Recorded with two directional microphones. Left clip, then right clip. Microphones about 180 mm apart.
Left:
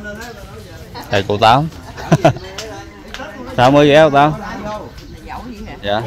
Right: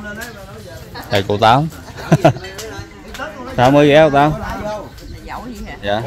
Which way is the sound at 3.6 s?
10° right (ahead or behind).